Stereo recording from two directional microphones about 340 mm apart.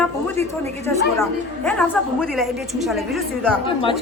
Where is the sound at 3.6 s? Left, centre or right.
Centre.